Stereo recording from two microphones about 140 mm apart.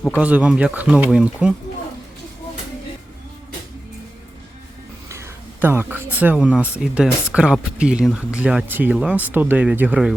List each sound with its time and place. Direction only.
0.2 s speech: 10° right (ahead or behind)
5.0 s a sound: 20° right (ahead or behind)
5.6 s speech: 15° right (ahead or behind)